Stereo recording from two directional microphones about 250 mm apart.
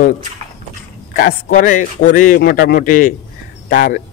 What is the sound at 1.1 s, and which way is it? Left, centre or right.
A man's voice, left.